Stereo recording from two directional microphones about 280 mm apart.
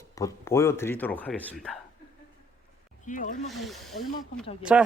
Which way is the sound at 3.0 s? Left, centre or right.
Left.